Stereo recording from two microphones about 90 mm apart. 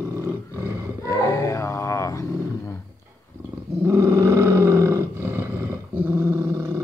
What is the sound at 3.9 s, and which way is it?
Roar, 30° right (ahead or behind).